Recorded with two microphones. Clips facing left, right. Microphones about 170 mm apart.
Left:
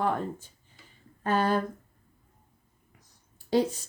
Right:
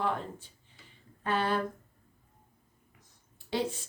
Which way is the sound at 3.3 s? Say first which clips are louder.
Left 7 dB; 40° left (ahead or behind).